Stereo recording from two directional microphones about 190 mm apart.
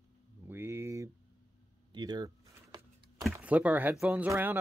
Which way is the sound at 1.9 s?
20° right (ahead or behind).